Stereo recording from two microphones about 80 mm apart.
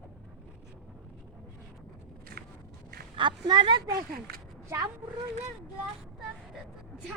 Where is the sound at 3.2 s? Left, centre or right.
Right.